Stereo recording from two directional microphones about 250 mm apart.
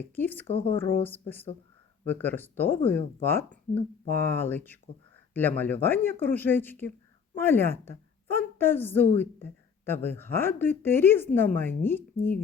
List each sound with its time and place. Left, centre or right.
0.0 s speech: centre
0.4 s speech: left
1.0 s a woman's voice: centre